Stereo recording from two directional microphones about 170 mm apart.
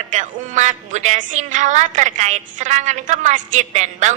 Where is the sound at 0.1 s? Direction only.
45° right (ahead or behind).